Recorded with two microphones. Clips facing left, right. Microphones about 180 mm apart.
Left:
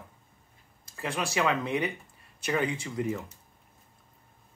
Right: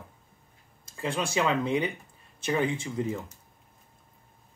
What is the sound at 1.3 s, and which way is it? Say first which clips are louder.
Speech: right 1 dB; 30° right (ahead or behind).